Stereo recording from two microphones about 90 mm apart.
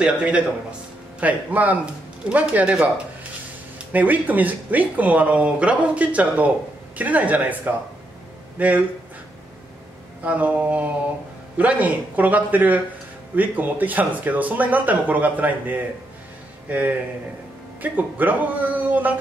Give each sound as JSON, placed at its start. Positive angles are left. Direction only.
{"t": 0.0, "sound": "speech", "side_deg": -10}
{"t": 10.2, "sound": "speech", "side_deg": -15}
{"t": 17.9, "sound": "speech", "side_deg": -20}